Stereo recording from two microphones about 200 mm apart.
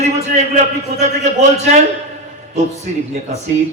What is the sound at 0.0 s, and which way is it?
A man's voice, 35° right (ahead or behind).